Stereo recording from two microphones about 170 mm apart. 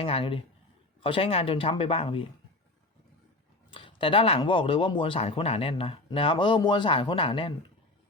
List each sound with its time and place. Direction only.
0.0 s speech: 30° left (ahead or behind)
3.7 s speech: 30° left (ahead or behind)